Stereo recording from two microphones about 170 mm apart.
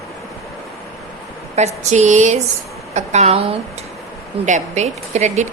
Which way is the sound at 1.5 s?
40° right (ahead or behind).